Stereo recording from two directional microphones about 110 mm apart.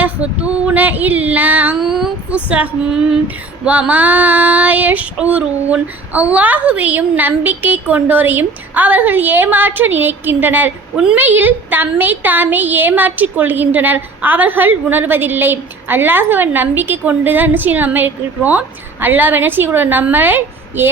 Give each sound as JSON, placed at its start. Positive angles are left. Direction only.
{"t": 0.0, "sound": "a woman's voice", "side_deg": -10}
{"t": 1.8, "sound": "a sound", "side_deg": -5}
{"t": 3.6, "sound": "a woman's voice", "side_deg": -15}
{"t": 10.9, "sound": "a woman's voice", "side_deg": -5}
{"t": 11.2, "sound": "a woman's voice", "side_deg": -15}